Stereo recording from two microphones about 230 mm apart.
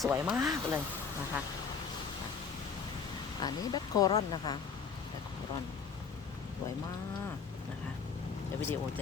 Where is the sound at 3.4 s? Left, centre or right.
Centre.